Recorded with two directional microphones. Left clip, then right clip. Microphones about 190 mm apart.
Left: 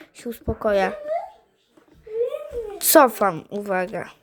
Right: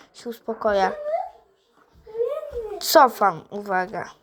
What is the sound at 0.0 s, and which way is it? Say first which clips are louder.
Speech: left 1 dB; 30° left (ahead or behind).